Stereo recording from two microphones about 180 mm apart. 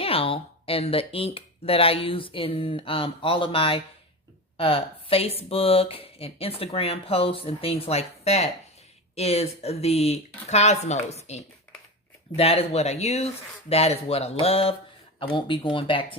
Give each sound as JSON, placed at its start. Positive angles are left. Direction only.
{"t": 0.0, "sound": "speech", "side_deg": 30}